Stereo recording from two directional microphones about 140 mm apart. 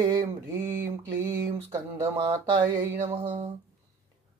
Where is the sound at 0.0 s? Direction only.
25° right (ahead or behind).